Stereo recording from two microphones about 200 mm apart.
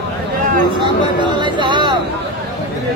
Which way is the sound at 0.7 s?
25° right (ahead or behind).